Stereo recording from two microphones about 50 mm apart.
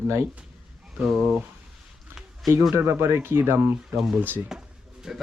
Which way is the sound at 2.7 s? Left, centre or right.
Right.